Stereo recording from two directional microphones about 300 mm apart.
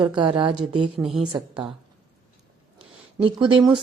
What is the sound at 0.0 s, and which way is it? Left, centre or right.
Speech, centre.